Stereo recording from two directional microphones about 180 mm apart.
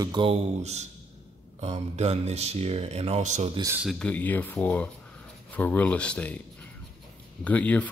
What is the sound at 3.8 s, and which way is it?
Speech, centre (ahead or behind).